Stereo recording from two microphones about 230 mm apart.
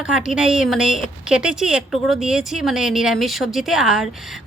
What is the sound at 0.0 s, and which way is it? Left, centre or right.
Speech, centre.